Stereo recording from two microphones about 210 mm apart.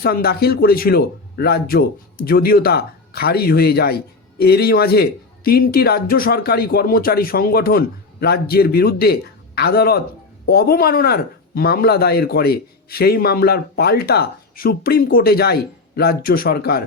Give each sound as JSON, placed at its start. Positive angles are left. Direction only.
{"t": 0.0, "sound": "speech", "side_deg": 50}